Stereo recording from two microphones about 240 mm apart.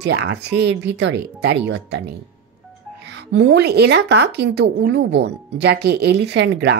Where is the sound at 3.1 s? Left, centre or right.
Right.